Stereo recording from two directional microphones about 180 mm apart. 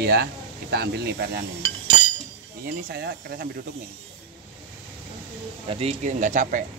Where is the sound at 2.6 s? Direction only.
60° right (ahead or behind).